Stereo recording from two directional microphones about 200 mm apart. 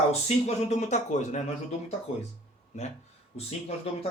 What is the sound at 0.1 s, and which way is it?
Speech, 35° left (ahead or behind).